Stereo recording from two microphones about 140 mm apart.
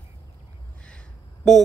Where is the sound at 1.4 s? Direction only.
Centre (ahead or behind).